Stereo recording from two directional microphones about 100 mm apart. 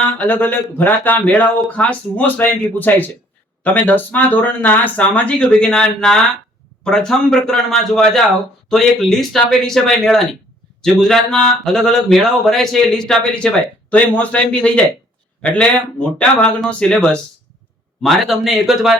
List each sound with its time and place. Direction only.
0.2 s speech: 15° left (ahead or behind)
18.0 s speech: centre (ahead or behind)